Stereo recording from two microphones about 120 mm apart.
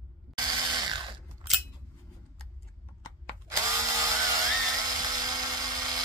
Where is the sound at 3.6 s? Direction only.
25° right (ahead or behind).